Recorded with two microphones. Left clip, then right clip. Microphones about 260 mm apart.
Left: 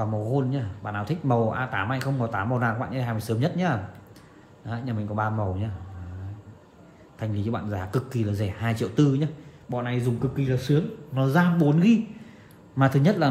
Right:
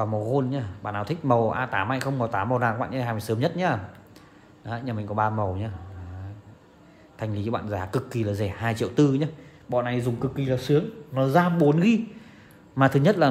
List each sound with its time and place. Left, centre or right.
0.0 s speech: right
7.2 s speech: right